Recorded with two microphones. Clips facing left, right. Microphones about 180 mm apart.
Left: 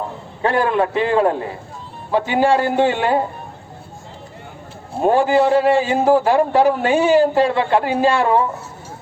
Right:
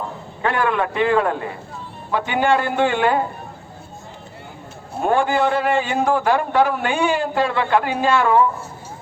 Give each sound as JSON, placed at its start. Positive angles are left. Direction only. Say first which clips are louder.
{"t": 0.4, "sound": "a man's voice", "louder": "left 3 dB", "side_deg": 30}
{"t": 5.0, "sound": "a man's voice", "louder": "left 4 dB", "side_deg": 30}